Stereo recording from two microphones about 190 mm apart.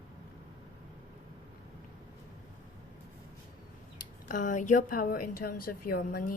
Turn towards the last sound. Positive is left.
turn(degrees=50)  # may be behind; listen again after turning